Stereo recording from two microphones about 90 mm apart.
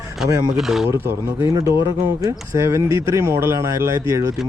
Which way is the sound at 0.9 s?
30° right (ahead or behind).